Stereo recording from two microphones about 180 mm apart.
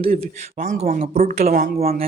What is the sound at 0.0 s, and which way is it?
Speech, 30° right (ahead or behind).